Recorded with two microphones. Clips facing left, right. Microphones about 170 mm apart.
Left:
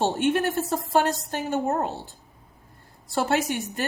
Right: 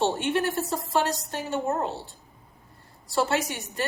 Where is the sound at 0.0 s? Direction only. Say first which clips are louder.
Left 2 dB; 50° left (ahead or behind).